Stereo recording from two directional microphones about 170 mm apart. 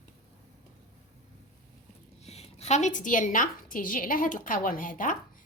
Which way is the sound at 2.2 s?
40° left (ahead or behind).